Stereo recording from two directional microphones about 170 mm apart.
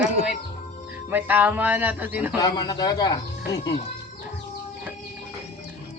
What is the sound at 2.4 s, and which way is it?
Speech, 25° left (ahead or behind).